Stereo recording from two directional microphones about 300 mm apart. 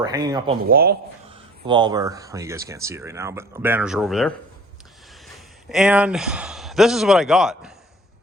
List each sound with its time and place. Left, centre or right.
0.0 s speech: centre
0.7 s speech: right
1.6 s speech: centre